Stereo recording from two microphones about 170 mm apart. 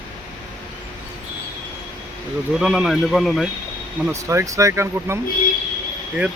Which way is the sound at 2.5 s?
Centre (ahead or behind).